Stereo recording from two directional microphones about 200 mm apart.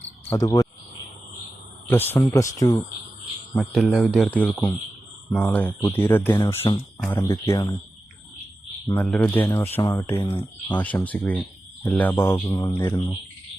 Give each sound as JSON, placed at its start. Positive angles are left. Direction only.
{"t": 0.3, "sound": "cricket", "side_deg": 15}
{"t": 1.9, "sound": "speech", "side_deg": 10}
{"t": 3.5, "sound": "speech", "side_deg": 0}
{"t": 9.0, "sound": "speech", "side_deg": 5}